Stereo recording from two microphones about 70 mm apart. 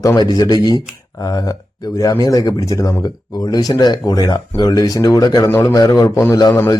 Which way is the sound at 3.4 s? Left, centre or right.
Left.